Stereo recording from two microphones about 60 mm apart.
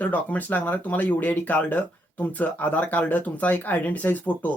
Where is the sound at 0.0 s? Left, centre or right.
Left.